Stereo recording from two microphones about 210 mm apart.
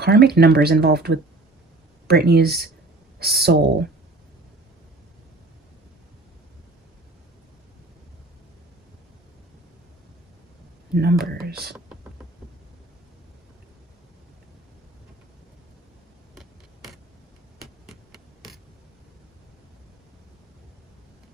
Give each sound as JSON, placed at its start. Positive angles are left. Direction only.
{"t": 0.0, "sound": "speech", "side_deg": -50}
{"t": 10.9, "sound": "speech", "side_deg": -50}
{"t": 16.3, "sound": "tick-tock", "side_deg": 0}
{"t": 17.6, "sound": "a sound", "side_deg": 0}